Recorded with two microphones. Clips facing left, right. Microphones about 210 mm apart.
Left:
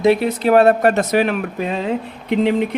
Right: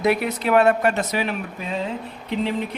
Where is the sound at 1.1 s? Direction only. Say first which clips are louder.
Left 8 dB; 60° left (ahead or behind).